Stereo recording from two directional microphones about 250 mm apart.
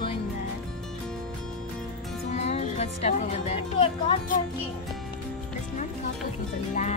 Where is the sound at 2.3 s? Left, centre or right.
Left.